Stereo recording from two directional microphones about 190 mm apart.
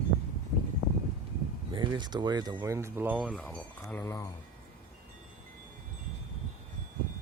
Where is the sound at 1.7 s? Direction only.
25° right (ahead or behind); by 4.0 s 5° left (ahead or behind).